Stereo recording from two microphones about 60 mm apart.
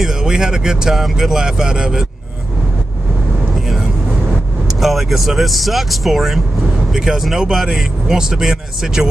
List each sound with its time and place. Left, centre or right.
0.0 s speech: centre
3.5 s vehicle: centre
4.7 s speech: centre